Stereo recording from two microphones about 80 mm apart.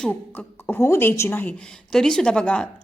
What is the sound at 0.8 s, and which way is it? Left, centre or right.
Speech, left.